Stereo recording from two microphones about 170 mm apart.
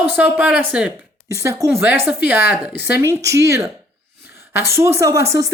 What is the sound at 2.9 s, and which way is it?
Speech, 15° right (ahead or behind).